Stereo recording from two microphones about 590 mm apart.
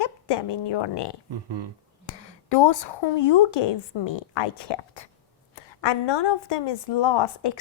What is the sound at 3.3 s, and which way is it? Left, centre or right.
A woman's voice, left.